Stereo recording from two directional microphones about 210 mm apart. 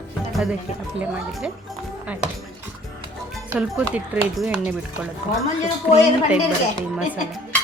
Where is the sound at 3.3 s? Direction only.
Centre (ahead or behind).